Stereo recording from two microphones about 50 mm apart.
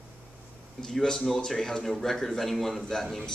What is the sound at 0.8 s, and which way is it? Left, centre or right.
A man's voice, centre.